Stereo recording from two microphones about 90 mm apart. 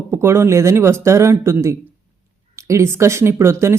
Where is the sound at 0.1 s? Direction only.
30° right (ahead or behind).